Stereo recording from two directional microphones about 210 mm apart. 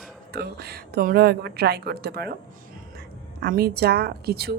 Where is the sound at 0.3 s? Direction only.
50° right (ahead or behind).